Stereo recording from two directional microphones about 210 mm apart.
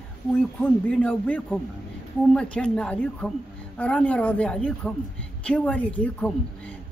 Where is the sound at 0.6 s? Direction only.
5° left (ahead or behind).